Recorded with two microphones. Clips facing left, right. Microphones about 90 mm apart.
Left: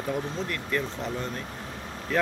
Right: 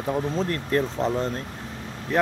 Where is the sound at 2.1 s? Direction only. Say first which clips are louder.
Right 4 dB; 20° right (ahead or behind).